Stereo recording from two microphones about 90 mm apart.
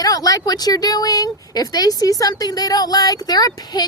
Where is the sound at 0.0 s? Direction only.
40° left (ahead or behind).